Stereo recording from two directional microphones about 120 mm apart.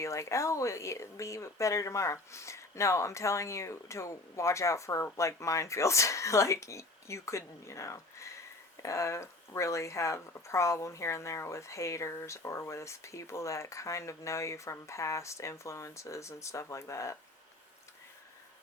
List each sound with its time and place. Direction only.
0.0 s speech: 25° left (ahead or behind)